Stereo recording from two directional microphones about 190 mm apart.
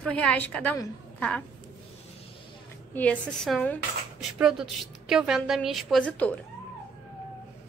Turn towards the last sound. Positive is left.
turn(degrees=5)  # may be behind; listen again after turning